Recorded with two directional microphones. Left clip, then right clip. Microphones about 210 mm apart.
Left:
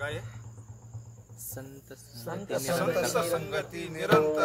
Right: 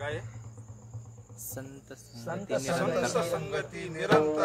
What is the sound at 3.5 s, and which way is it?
Music, 30° left (ahead or behind).